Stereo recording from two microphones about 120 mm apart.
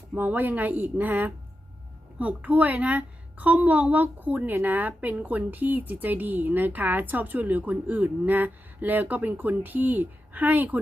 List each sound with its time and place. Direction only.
0.1 s a woman's voice: 15° right (ahead or behind)